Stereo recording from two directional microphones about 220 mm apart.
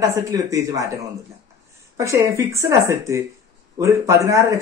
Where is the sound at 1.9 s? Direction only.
15° right (ahead or behind).